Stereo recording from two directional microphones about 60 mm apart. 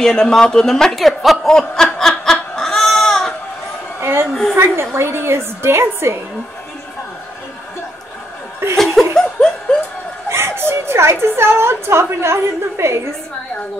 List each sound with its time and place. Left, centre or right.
0.0 s a man's voice: centre
1.5 s snicker: centre
2.5 s chicken: centre
4.0 s a sound: right
4.3 s a sound: centre
4.6 s a woman's voice: right
8.7 s laughter: centre
10.3 s a woman's voice: right